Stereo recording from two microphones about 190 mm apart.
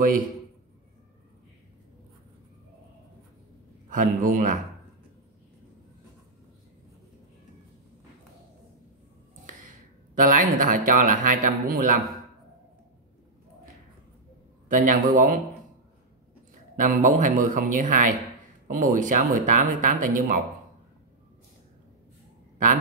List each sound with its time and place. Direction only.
3.9 s speech: 45° right (ahead or behind)
10.1 s speech: 45° right (ahead or behind)
14.7 s speech: 45° right (ahead or behind)
16.7 s speech: 45° right (ahead or behind)